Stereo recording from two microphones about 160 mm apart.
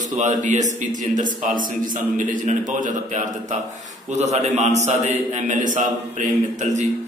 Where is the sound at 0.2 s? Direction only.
50° right (ahead or behind).